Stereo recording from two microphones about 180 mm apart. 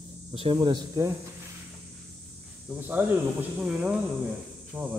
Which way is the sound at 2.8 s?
10° right (ahead or behind).